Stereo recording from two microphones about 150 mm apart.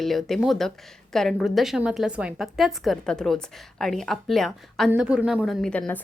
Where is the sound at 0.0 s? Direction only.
Centre (ahead or behind).